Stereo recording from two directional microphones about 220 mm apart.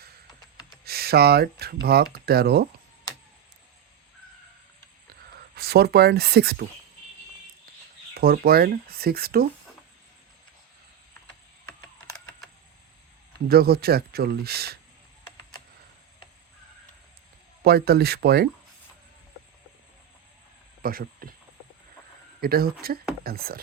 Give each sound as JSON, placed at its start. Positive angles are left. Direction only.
{"t": 0.9, "sound": "speech", "side_deg": -45}
{"t": 5.5, "sound": "speech", "side_deg": -45}
{"t": 8.1, "sound": "speech", "side_deg": -45}
{"t": 13.5, "sound": "speech", "side_deg": -45}
{"t": 17.6, "sound": "speech", "side_deg": -45}
{"t": 20.8, "sound": "speech", "side_deg": -40}
{"t": 22.4, "sound": "speech", "side_deg": -45}